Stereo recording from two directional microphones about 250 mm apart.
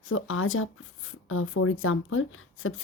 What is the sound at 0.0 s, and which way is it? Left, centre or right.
Speech, left.